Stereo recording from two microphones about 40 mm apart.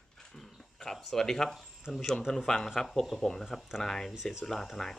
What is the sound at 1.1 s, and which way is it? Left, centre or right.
Speech, centre.